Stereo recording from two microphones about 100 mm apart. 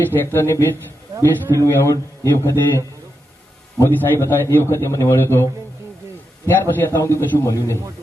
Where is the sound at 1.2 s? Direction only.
30° right (ahead or behind).